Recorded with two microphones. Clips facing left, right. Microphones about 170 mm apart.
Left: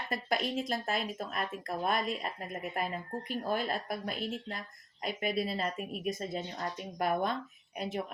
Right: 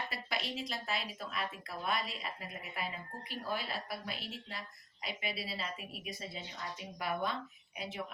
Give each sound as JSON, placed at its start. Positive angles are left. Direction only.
{"t": 0.1, "sound": "speech", "side_deg": 50}